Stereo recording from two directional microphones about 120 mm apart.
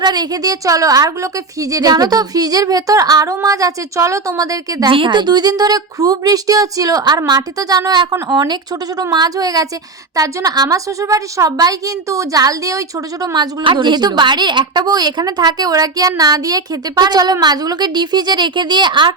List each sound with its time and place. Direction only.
0.0 s a woman's voice: 35° right (ahead or behind)
4.9 s a woman's voice: 45° right (ahead or behind)
13.3 s a woman's voice: 40° right (ahead or behind)